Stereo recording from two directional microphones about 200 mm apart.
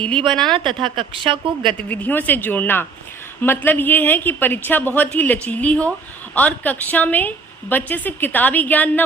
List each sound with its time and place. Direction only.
0.5 s a woman's voice: 25° right (ahead or behind)
1.9 s a woman's voice: 10° left (ahead or behind)